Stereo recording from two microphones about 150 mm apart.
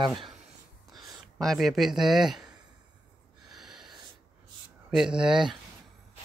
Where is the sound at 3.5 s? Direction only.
Centre (ahead or behind).